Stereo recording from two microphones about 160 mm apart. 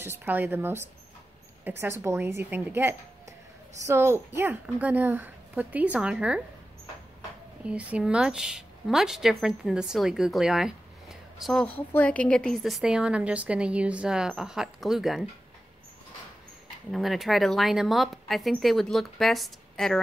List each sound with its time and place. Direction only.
0.0 s a woman's voice: 15° right (ahead or behind)
7.6 s a woman's voice: 5° right (ahead or behind)
11.6 s a woman's voice: 10° left (ahead or behind)
16.9 s a woman's voice: centre (ahead or behind)